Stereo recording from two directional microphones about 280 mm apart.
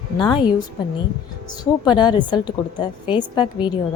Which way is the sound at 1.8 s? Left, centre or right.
Centre.